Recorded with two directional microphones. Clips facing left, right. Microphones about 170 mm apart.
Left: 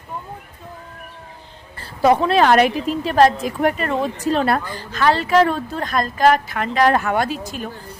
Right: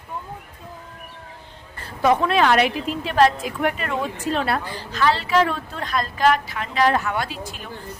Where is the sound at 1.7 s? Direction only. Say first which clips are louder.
Left 3 dB; 35° left (ahead or behind).